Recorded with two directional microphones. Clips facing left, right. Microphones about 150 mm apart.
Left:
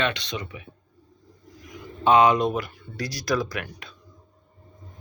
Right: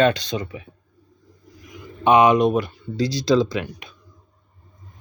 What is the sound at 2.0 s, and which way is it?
Speech, 20° right (ahead or behind).